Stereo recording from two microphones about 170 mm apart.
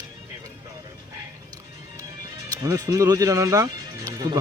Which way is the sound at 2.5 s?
20° right (ahead or behind).